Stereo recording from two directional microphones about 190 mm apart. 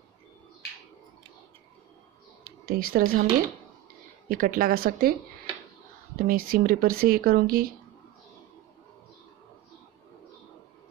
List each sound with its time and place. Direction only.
2.7 s speech: 50° right (ahead or behind)
4.3 s speech: 50° right (ahead or behind)
6.1 s speech: 50° right (ahead or behind)